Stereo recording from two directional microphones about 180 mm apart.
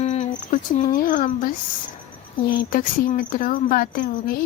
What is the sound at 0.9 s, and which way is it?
A woman's voice, 45° left (ahead or behind).